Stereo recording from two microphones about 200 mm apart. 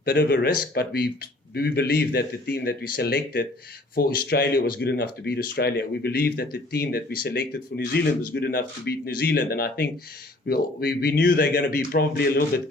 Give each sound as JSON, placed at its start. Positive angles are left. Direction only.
{"t": 0.0, "sound": "speech", "side_deg": 50}